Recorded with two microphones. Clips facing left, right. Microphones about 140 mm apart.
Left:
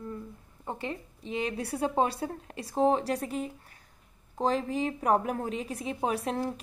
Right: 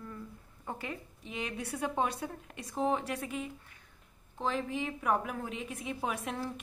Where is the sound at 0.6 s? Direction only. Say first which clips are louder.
Left 4 dB; 25° left (ahead or behind).